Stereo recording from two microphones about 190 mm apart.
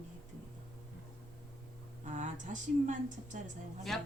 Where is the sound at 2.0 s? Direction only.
40° right (ahead or behind).